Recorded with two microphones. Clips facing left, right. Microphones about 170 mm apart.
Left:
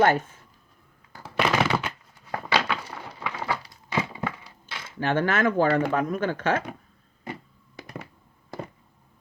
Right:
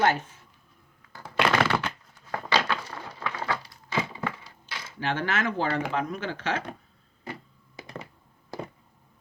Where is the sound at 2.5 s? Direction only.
10° left (ahead or behind).